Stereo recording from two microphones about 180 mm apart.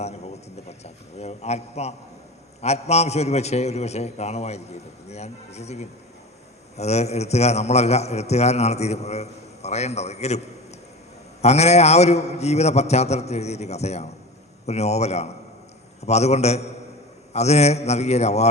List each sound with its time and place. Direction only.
0.0 s a sound: 35° left (ahead or behind)
1.2 s a man's voice: 35° left (ahead or behind)
11.4 s a man's voice: 35° left (ahead or behind)